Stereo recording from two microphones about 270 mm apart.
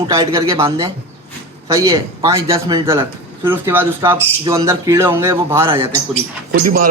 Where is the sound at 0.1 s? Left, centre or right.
Centre.